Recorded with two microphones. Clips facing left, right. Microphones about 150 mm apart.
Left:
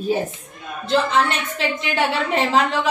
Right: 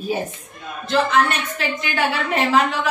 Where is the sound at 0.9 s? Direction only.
30° left (ahead or behind).